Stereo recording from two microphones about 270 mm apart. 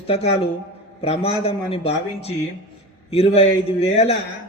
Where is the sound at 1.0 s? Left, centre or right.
Left.